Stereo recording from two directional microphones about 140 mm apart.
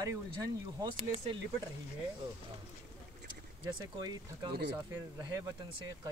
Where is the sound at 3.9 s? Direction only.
30° right (ahead or behind).